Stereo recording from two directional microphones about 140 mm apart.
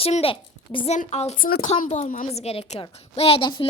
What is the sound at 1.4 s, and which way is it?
Speech, 90° left.